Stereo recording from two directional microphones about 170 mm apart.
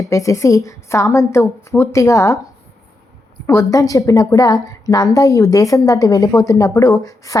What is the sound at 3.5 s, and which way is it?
A woman's voice, 20° left (ahead or behind).